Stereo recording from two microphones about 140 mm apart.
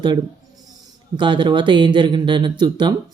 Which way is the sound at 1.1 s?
35° right (ahead or behind).